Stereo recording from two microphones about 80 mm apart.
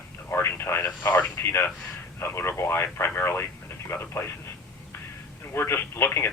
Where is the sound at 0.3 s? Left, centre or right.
Left.